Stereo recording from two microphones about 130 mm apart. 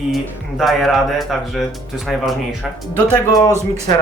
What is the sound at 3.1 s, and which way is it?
Speech, 25° left (ahead or behind).